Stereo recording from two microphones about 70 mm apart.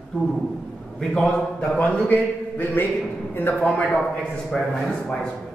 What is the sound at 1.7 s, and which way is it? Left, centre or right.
A man's voice, left.